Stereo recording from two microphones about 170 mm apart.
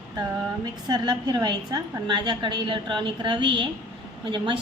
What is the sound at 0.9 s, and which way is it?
A woman's voice, 25° right (ahead or behind).